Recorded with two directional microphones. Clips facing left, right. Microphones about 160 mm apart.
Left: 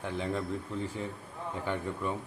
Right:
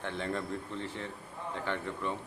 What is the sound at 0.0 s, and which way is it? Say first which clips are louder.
Speech: left 2 dB; 5° left (ahead or behind).